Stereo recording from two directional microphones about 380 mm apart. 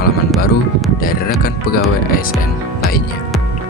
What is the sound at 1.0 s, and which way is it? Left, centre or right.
Speech, left.